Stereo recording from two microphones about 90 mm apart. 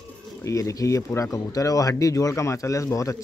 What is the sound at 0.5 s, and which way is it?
A man's voice, 40° left (ahead or behind).